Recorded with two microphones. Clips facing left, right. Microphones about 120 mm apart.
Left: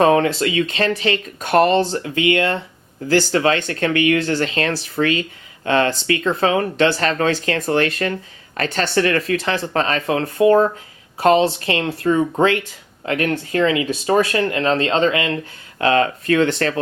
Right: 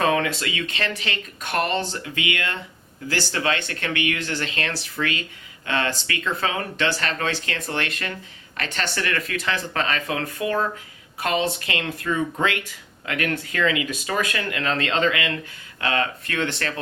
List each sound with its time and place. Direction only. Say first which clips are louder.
0.0 s speech: left 7 dB; 35° left (ahead or behind)